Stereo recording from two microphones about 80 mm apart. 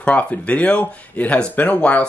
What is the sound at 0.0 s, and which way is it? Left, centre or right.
Speech, centre.